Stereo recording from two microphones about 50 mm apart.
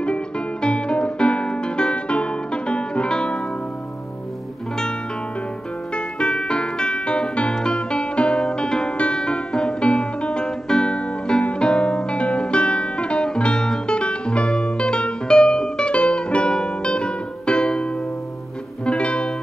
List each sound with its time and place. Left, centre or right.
0.0 s music: left
5.9 s music: centre
18.9 s music: left